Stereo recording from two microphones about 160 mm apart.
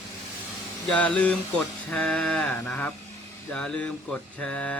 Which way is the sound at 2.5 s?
10° left (ahead or behind).